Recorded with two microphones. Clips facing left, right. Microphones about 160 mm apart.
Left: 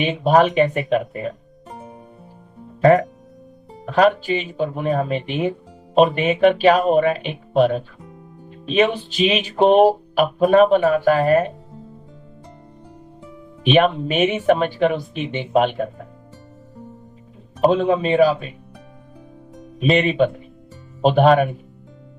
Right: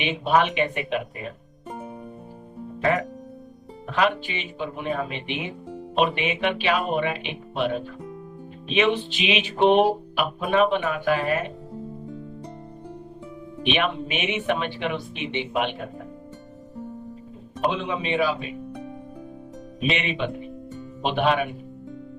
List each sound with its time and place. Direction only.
0.0 s speech: 40° left (ahead or behind)
3.9 s speech: 40° left (ahead or behind)
8.7 s speech: 40° left (ahead or behind)
13.7 s speech: 40° left (ahead or behind)
17.7 s speech: 40° left (ahead or behind)
19.9 s speech: 40° left (ahead or behind)